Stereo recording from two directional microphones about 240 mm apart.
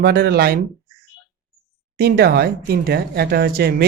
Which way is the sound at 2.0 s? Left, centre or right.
Right.